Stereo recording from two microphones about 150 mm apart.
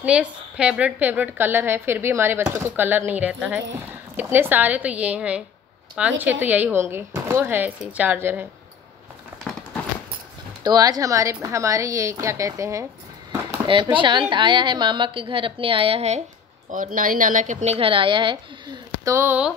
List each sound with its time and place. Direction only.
0.0 s a woman's voice: 5° right (ahead or behind)
10.6 s speech: 25° right (ahead or behind)
13.7 s a woman's voice: 35° right (ahead or behind)
16.7 s speech: 65° right (ahead or behind)
17.7 s a woman's voice: 35° right (ahead or behind)
19.1 s a woman's voice: 10° right (ahead or behind)